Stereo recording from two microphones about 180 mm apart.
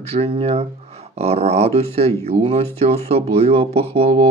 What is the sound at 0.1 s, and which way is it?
Speech, 35° right (ahead or behind).